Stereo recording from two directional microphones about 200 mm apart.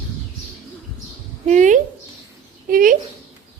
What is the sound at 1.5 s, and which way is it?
Child singing, 40° right (ahead or behind).